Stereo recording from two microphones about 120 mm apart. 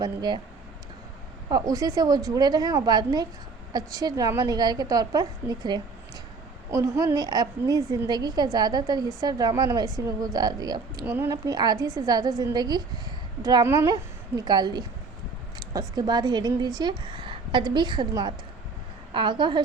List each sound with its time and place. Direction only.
0.0 s a woman's voice: 35° right (ahead or behind)
1.5 s a woman's voice: 30° right (ahead or behind)
5.4 s speech: 15° right (ahead or behind)
6.7 s a woman's voice: 25° right (ahead or behind)
11.0 s a woman's voice: 20° right (ahead or behind); by 19.6 s 40° right (ahead or behind)